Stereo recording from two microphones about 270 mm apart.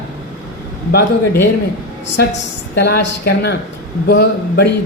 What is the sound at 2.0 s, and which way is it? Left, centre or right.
A man's voice, left.